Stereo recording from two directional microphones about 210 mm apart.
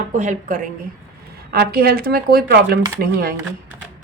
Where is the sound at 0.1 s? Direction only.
35° right (ahead or behind).